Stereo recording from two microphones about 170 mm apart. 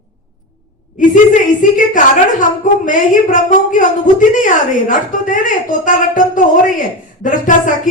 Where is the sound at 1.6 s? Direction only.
50° left (ahead or behind).